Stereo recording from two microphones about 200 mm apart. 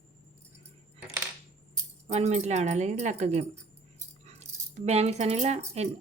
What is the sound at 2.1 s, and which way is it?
Speech, 35° right (ahead or behind).